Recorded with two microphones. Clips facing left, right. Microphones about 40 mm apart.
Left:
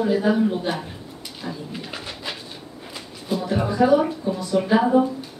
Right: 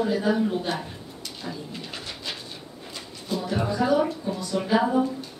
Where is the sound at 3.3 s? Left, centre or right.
Centre.